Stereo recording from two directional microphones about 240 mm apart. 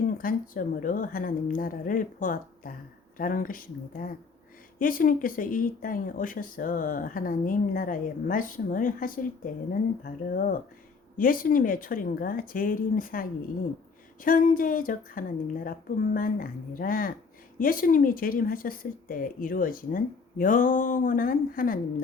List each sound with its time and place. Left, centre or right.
0.2 s speech: left
14.3 s speech: left